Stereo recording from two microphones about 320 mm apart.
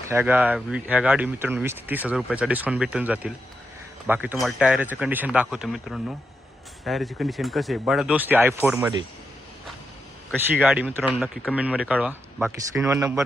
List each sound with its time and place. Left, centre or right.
0.1 s speech: centre
10.3 s speech: centre